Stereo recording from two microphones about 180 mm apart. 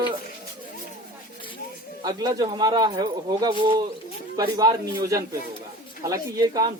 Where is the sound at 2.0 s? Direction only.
20° right (ahead or behind).